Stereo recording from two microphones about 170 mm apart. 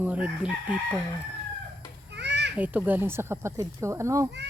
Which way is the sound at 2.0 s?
90° right.